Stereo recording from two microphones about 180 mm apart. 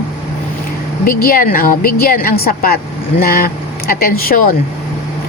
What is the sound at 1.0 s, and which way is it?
Speech, 55° left (ahead or behind).